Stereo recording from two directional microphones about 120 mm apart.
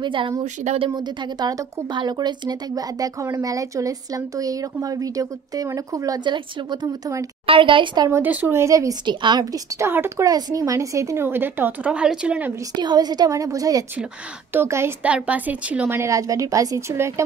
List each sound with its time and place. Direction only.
0.0 s a woman's voice: 45° right (ahead or behind)
8.1 s speech: 15° right (ahead or behind)
12.7 s speech: 35° right (ahead or behind)
15.0 s a woman's voice: 10° right (ahead or behind)
16.0 s speech: 25° right (ahead or behind)